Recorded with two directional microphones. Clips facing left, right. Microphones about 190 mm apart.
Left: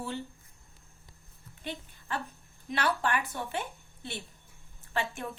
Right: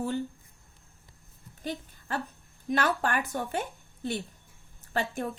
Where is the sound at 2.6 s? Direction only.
45° right (ahead or behind).